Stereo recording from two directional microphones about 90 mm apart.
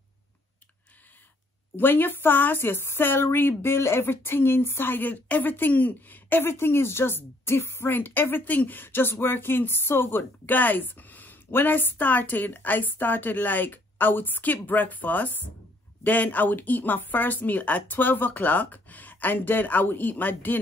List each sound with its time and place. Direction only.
1.8 s speech: 25° left (ahead or behind)